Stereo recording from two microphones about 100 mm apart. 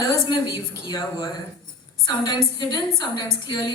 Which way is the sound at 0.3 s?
40° left (ahead or behind).